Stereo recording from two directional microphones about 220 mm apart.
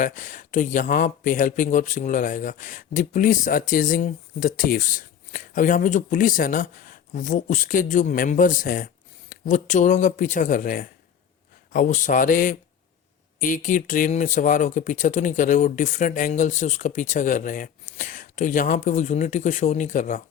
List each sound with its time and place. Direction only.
0.0 s speech: 35° left (ahead or behind)